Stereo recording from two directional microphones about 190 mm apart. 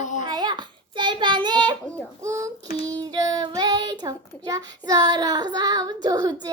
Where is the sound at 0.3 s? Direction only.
20° right (ahead or behind).